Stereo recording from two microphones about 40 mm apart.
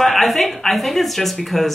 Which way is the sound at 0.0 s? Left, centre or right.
Centre.